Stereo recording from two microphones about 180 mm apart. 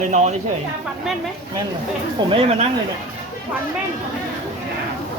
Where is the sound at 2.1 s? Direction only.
30° right (ahead or behind).